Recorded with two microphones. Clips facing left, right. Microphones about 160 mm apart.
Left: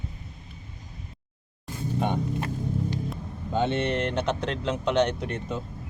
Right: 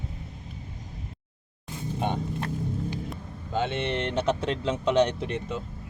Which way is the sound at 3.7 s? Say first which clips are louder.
Left 3 dB; 45° left (ahead or behind).